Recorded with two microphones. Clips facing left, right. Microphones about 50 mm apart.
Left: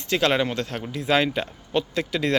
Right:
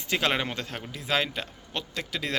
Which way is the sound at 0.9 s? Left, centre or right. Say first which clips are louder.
Left 6 dB; centre.